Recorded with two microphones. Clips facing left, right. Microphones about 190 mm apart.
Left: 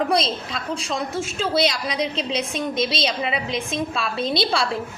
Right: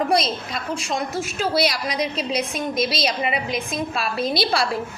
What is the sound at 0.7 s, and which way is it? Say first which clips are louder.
A woman's voice: even; 30° left (ahead or behind).